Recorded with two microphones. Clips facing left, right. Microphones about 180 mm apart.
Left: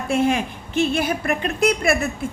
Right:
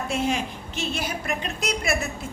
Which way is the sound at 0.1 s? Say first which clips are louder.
Left 8 dB; 55° left (ahead or behind).